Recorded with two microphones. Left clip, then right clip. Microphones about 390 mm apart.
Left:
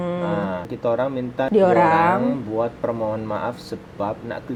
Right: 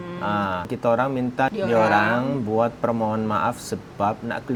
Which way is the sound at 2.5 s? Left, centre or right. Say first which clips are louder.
Right 1 dB; right.